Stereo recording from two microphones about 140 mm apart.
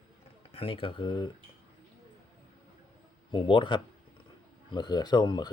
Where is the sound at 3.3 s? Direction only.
35° left (ahead or behind).